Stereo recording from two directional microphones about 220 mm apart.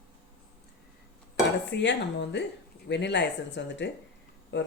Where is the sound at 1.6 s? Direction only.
55° left (ahead or behind).